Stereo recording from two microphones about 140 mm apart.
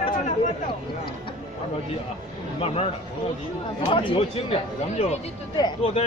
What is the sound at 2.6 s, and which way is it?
Speech, 45° left (ahead or behind).